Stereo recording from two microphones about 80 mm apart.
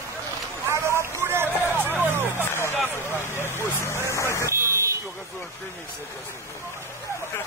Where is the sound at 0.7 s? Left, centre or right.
Right.